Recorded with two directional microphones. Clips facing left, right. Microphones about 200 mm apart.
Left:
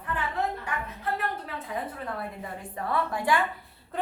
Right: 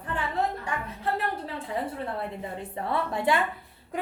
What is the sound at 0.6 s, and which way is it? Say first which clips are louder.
A woman's voice: right 2 dB; 30° right (ahead or behind).